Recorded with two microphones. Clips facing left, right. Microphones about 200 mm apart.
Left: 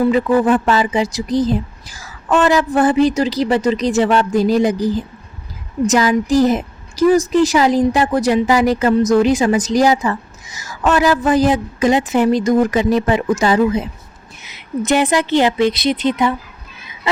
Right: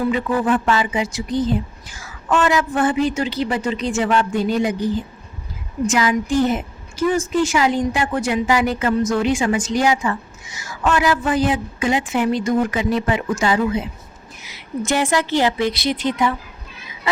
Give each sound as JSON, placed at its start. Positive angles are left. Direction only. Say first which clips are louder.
{"t": 0.1, "sound": "a woman's voice", "louder": "left 5 dB", "side_deg": 40}
{"t": 5.9, "sound": "a woman's voice", "louder": "left 5 dB", "side_deg": 40}
{"t": 14.4, "sound": "a woman's voice", "louder": "left 4 dB", "side_deg": 20}